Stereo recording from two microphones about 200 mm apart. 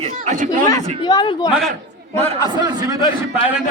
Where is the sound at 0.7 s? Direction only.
20° left (ahead or behind).